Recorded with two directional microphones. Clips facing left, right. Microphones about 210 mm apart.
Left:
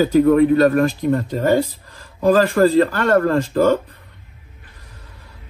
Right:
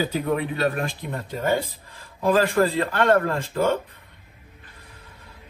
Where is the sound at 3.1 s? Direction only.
50° left (ahead or behind).